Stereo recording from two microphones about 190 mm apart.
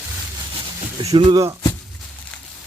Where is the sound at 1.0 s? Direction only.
25° right (ahead or behind).